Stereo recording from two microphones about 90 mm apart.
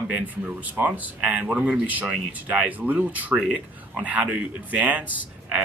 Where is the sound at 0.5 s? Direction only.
15° right (ahead or behind).